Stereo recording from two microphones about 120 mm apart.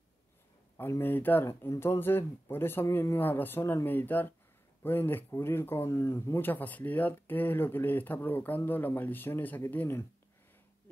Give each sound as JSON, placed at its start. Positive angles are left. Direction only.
{"t": 0.7, "sound": "speech", "side_deg": 20}